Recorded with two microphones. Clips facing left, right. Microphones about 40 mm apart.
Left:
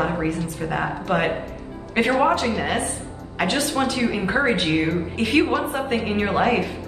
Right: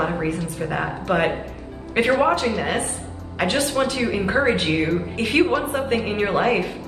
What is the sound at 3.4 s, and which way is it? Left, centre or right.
Speech, centre.